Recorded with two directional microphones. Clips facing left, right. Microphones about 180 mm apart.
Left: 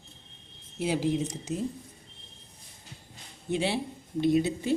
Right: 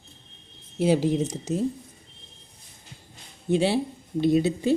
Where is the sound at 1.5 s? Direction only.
40° right (ahead or behind).